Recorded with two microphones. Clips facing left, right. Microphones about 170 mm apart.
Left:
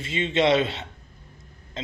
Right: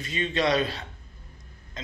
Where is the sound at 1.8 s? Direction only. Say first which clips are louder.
Left 6 dB; 25° left (ahead or behind).